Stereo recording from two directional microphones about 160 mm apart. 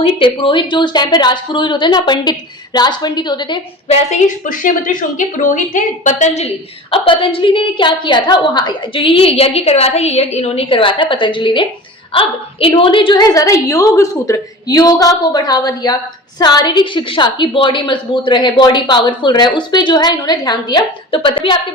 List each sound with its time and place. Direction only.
0.0 s a woman's voice: 35° left (ahead or behind)
4.6 s a woman's voice: 55° left (ahead or behind)
6.9 s a woman's voice: 35° left (ahead or behind)